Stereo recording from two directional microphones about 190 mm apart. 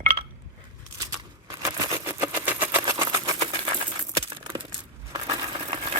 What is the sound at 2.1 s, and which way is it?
Sewing machine, 10° right (ahead or behind).